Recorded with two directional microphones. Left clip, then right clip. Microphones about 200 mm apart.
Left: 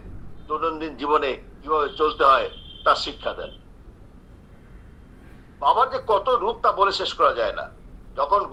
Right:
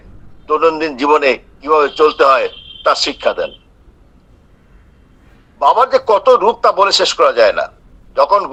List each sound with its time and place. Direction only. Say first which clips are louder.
0.4 s a man's voice: right 13 dB; 55° right (ahead or behind)
5.5 s a man's voice: right 9 dB; 60° right (ahead or behind)